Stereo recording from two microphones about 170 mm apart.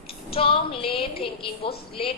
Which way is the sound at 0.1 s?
35° left (ahead or behind).